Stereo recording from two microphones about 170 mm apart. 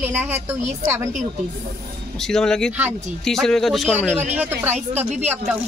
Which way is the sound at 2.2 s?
5° left (ahead or behind).